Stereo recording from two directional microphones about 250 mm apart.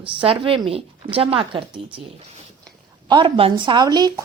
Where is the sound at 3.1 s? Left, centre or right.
Right.